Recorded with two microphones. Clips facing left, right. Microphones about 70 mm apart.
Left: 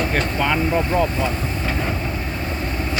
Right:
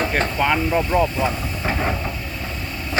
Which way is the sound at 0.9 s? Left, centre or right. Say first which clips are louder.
Right 1 dB; centre.